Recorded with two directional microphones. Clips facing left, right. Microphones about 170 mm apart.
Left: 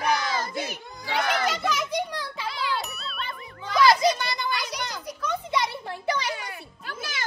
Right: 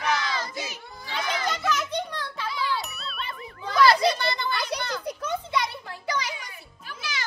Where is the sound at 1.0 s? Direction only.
65° left (ahead or behind).